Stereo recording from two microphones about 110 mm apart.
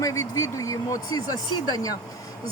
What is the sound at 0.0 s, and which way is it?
Speech, 30° left (ahead or behind).